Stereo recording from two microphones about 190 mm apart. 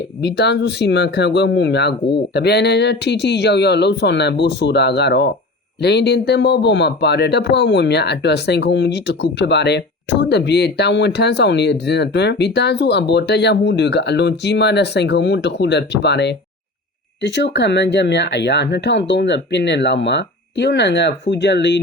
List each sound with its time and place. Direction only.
0.2 s a man's voice: 60° left (ahead or behind)